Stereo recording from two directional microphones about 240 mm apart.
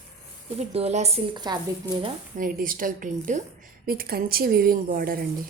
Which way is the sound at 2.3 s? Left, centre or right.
Right.